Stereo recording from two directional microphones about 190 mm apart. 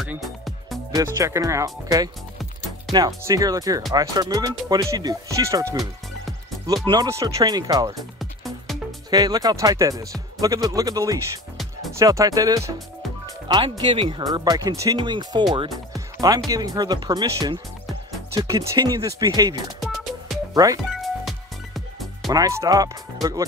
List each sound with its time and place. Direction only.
0.0 s music: centre (ahead or behind)
0.9 s speech: 15° right (ahead or behind)
6.9 s speech: 20° right (ahead or behind)
9.1 s speech: 20° right (ahead or behind)
15.5 s music: 25° right (ahead or behind)
16.4 s speech: 20° right (ahead or behind)
19.8 s music: centre (ahead or behind)
20.5 s speech: 20° right (ahead or behind)
21.0 s music: centre (ahead or behind)
22.3 s speech: 15° right (ahead or behind)